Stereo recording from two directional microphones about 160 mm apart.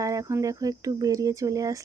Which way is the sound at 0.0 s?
20° right (ahead or behind).